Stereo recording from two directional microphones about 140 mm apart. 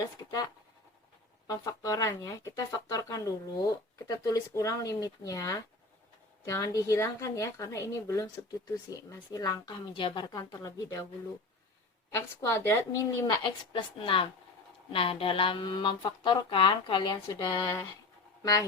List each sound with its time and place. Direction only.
1.5 s a woman's voice: 25° left (ahead or behind)
9.3 s a woman's voice: 25° left (ahead or behind)
12.1 s a woman's voice: 20° left (ahead or behind)
13.4 s speech: 35° left (ahead or behind)